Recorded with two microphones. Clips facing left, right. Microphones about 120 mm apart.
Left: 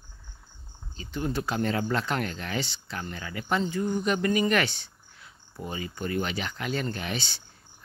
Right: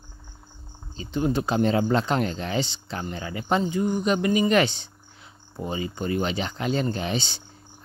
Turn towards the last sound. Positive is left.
turn(degrees=-25)  # may be behind; listen again after turning